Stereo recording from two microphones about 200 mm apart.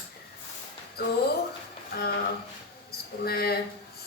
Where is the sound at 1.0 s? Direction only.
50° left (ahead or behind).